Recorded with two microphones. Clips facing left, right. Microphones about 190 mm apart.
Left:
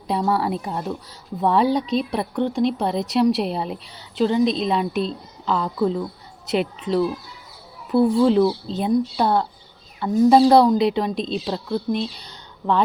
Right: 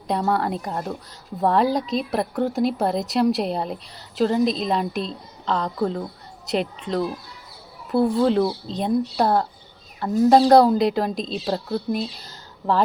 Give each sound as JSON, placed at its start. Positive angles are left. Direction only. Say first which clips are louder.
{"t": 0.1, "sound": "speech", "louder": "left 1 dB", "side_deg": 0}